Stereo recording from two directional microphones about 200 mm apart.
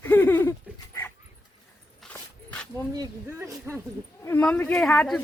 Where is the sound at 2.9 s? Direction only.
15° right (ahead or behind).